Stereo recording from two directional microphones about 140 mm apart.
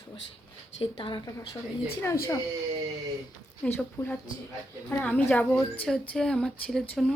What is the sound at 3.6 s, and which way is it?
Speech, 10° left (ahead or behind).